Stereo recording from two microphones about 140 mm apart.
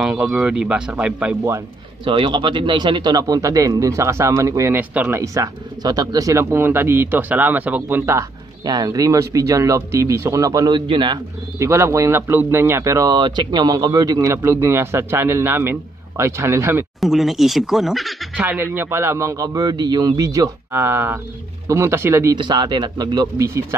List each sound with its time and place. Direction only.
0.0 s speech: 5° right (ahead or behind)
2.0 s speech: 35° right (ahead or behind)
11.5 s speech: 20° right (ahead or behind)
17.0 s speech: centre (ahead or behind)
18.4 s speech: 15° right (ahead or behind)
22.4 s speech: 30° right (ahead or behind)